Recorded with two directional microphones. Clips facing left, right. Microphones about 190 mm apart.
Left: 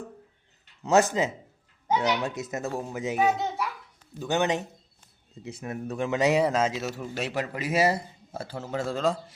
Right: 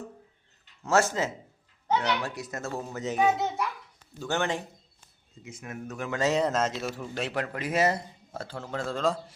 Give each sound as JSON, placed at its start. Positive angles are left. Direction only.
{"t": 0.9, "sound": "speech", "side_deg": 15}
{"t": 3.2, "sound": "a child's voice", "side_deg": 0}
{"t": 4.2, "sound": "speech", "side_deg": 15}
{"t": 5.4, "sound": "speech", "side_deg": 35}
{"t": 6.1, "sound": "speech", "side_deg": 15}